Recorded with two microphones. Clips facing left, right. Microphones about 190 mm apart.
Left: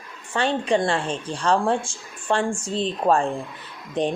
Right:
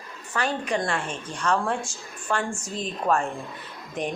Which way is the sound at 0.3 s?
30° left (ahead or behind).